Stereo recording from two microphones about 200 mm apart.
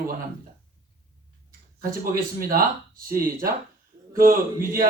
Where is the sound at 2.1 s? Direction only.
45° right (ahead or behind).